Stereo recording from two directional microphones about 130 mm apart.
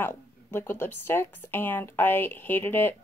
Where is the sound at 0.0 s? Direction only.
20° left (ahead or behind).